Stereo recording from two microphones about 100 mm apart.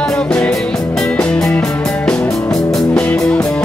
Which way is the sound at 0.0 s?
10° left (ahead or behind).